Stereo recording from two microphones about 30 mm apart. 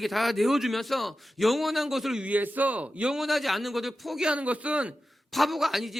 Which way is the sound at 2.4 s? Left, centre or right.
Right.